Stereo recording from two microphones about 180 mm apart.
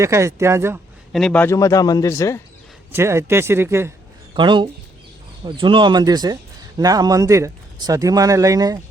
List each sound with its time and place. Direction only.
0.0 s speech: 15° right (ahead or behind)
1.1 s speech: 5° left (ahead or behind)
2.9 s speech: 15° right (ahead or behind)
4.4 s speech: 25° right (ahead or behind)